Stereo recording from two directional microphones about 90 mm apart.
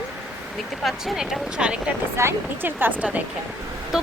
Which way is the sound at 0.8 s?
5° right (ahead or behind).